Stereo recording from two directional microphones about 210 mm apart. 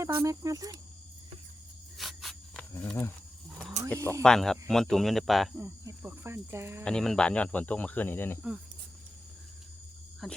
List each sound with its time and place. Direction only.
0.0 s speech: 15° right (ahead or behind)
2.0 s a sound: centre (ahead or behind)
3.8 s mechanisms: 35° right (ahead or behind)
4.2 s speech: centre (ahead or behind)
5.5 s speech: 15° right (ahead or behind)
6.8 s speech: 5° left (ahead or behind)
10.2 s speech: centre (ahead or behind)